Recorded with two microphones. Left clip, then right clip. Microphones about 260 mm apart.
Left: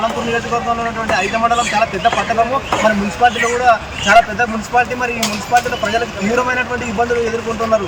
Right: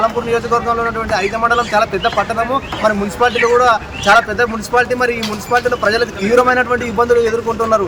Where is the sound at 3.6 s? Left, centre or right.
Centre.